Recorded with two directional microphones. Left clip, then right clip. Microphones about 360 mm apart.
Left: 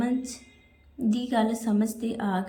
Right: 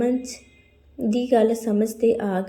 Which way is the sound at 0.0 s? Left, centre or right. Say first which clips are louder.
Right 6 dB; centre.